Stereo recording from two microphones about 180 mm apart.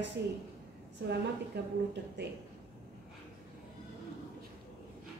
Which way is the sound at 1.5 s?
65° right (ahead or behind).